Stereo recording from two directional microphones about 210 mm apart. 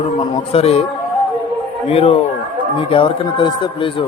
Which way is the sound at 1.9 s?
30° left (ahead or behind).